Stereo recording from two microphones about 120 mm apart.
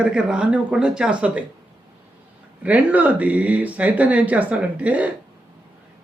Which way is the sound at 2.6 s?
10° right (ahead or behind).